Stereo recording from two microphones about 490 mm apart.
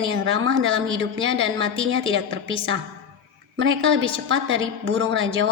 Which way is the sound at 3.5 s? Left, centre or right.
Right.